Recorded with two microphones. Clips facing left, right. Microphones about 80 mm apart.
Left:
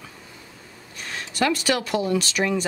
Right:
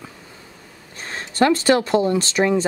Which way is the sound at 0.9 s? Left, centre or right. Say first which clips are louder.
Right 6 dB; right.